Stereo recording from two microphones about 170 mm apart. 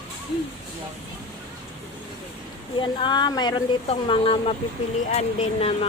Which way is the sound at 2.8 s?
30° left (ahead or behind).